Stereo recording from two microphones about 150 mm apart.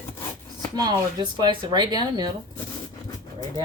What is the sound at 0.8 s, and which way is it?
Speech, 30° right (ahead or behind).